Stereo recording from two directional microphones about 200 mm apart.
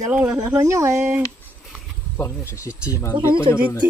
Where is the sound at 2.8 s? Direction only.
15° left (ahead or behind).